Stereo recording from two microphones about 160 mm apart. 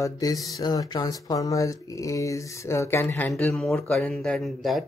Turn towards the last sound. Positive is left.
turn(degrees=0)  # may be behind; listen again after turning